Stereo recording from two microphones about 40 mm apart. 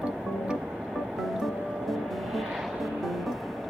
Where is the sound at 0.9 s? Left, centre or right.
Centre.